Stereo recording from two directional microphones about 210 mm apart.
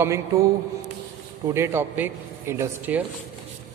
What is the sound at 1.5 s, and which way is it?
A man's voice, 10° right (ahead or behind).